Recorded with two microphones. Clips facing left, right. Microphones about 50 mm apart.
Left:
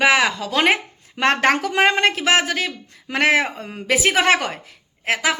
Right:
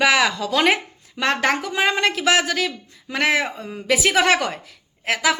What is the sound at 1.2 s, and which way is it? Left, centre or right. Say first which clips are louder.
Speech: left 3 dB; left.